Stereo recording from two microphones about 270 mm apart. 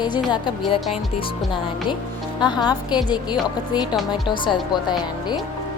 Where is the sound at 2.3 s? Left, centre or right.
Centre.